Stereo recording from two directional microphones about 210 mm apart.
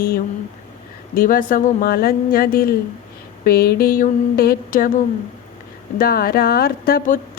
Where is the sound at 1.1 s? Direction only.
40° left (ahead or behind).